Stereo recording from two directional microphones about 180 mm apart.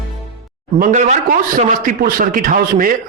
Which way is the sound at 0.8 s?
40° right (ahead or behind).